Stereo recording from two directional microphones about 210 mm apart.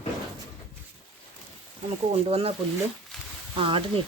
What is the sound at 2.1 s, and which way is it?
Speech, 25° right (ahead or behind).